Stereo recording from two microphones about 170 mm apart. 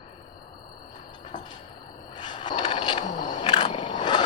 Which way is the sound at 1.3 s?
45° left (ahead or behind).